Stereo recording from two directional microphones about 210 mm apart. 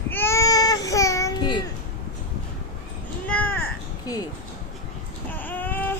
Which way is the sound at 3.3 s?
5° left (ahead or behind).